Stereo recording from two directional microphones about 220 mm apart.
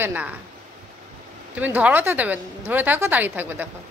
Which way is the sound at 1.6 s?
5° right (ahead or behind).